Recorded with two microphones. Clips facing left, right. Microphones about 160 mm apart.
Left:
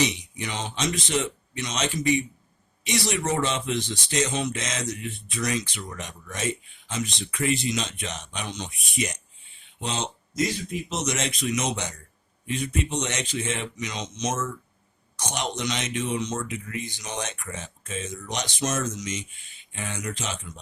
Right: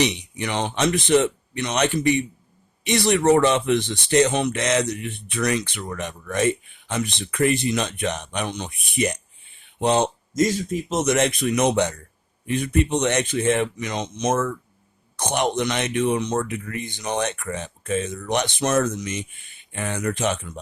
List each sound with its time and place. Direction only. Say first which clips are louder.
0.0 s speech: right 4 dB; 65° right (ahead or behind)